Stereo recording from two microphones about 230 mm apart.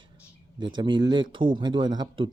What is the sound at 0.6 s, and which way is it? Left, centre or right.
A man's voice, centre.